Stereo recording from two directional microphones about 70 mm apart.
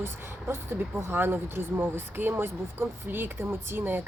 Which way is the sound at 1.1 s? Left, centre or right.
Right.